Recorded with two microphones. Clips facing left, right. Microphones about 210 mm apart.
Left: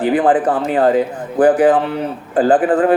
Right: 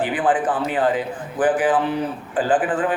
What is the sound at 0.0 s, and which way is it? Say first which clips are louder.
A man's voice: left 6 dB; 40° left (ahead or behind).